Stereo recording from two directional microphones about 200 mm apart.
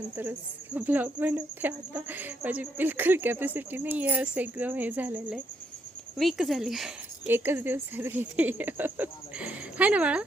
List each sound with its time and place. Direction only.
0.2 s speech: 10° right (ahead or behind)